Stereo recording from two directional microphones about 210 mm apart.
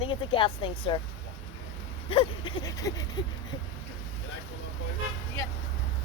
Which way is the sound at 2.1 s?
25° left (ahead or behind).